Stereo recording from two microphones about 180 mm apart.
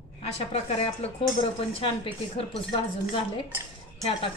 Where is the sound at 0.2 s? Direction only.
35° left (ahead or behind).